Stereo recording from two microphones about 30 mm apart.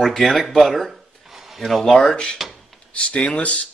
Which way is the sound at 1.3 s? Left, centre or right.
Centre.